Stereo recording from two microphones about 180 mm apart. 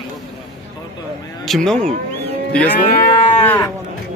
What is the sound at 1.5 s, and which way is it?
Speech, 5° left (ahead or behind).